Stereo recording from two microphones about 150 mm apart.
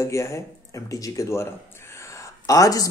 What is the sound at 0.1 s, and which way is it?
A man's voice, 20° left (ahead or behind).